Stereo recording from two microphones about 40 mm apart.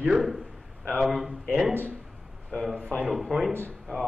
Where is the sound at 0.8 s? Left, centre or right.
Centre.